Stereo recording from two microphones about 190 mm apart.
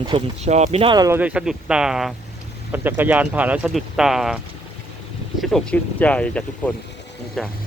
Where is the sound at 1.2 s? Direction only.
5° right (ahead or behind).